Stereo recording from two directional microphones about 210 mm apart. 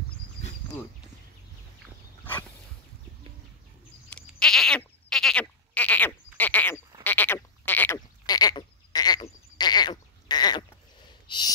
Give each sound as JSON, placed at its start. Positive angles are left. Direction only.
{"t": 4.1, "sound": "goat", "side_deg": 5}
{"t": 7.0, "sound": "frog", "side_deg": 10}
{"t": 11.2, "sound": "a sound", "side_deg": 20}